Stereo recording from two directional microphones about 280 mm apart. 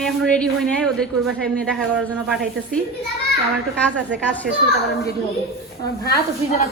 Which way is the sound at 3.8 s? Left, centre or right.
Centre.